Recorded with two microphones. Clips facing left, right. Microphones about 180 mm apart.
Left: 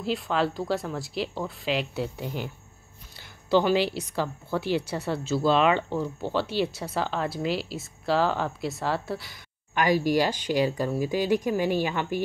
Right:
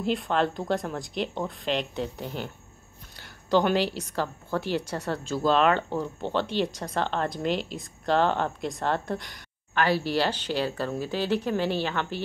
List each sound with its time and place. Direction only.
0.0 s speech: centre (ahead or behind)